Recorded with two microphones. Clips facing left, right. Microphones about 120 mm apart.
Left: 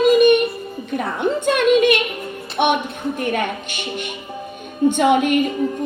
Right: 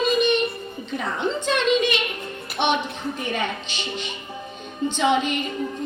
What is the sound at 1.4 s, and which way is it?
Music, 55° left (ahead or behind).